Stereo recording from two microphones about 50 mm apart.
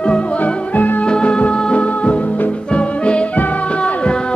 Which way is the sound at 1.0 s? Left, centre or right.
Centre.